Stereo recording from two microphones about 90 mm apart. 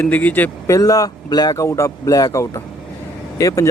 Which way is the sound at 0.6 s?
40° left (ahead or behind).